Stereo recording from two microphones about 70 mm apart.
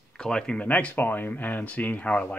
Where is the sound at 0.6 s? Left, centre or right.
Left.